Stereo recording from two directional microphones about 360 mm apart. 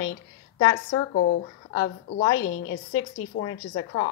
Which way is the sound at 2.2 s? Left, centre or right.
Centre.